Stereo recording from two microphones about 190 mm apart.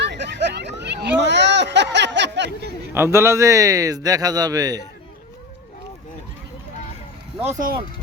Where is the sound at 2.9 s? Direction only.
15° right (ahead or behind).